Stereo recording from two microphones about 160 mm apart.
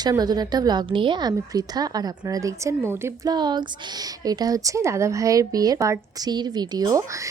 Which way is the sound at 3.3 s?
25° right (ahead or behind).